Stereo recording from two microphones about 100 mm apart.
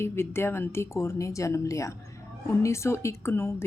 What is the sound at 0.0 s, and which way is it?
A woman's voice, 25° left (ahead or behind).